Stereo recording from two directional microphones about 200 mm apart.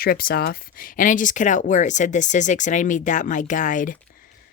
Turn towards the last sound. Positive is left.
turn(degrees=40)  # may be behind; listen again after turning